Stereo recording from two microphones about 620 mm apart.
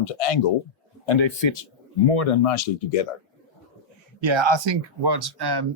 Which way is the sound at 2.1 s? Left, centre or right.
Left.